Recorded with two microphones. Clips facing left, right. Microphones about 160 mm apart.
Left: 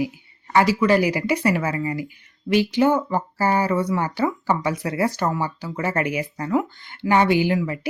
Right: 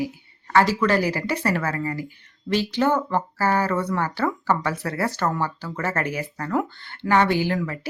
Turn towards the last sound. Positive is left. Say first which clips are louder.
# left 3 dB
turn(degrees=15)  # may be behind; listen again after turning